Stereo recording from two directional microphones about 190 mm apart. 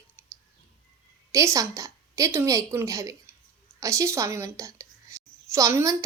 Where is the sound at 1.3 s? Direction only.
15° right (ahead or behind).